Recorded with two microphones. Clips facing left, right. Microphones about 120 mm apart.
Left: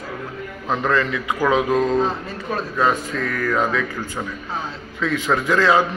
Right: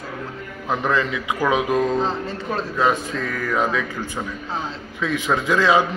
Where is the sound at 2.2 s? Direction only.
25° right (ahead or behind).